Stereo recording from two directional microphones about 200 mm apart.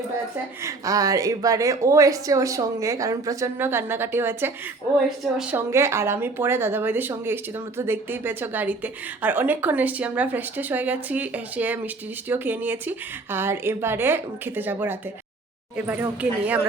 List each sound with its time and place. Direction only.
0.6 s a woman's voice: 15° right (ahead or behind)